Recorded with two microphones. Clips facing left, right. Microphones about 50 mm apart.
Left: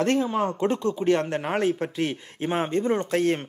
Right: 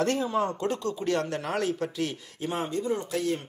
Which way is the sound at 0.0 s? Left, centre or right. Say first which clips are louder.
Left 3 dB; left.